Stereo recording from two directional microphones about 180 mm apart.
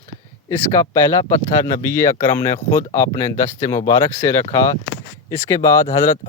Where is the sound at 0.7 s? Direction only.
20° left (ahead or behind).